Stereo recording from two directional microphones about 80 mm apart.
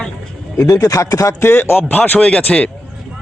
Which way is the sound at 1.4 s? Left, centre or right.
Left.